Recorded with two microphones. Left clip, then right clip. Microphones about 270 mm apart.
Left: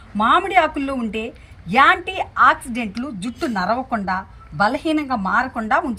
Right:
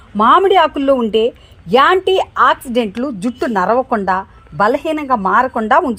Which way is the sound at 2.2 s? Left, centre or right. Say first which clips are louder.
Right 3 dB; right.